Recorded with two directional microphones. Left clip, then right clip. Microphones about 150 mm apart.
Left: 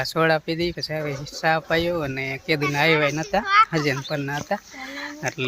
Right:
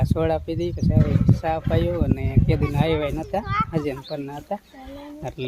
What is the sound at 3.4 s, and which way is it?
Speech, 90° right.